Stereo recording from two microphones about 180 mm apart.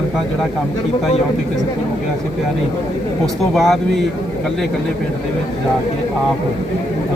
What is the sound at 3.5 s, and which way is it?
Speech, centre (ahead or behind).